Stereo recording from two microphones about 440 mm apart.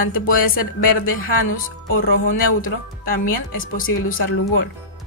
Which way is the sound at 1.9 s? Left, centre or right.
Centre.